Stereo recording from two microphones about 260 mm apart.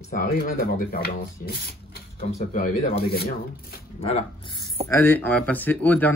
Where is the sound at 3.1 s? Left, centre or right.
Left.